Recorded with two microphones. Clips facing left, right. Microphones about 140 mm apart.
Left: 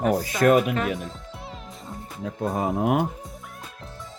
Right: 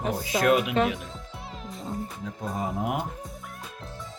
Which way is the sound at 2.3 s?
65° left (ahead or behind).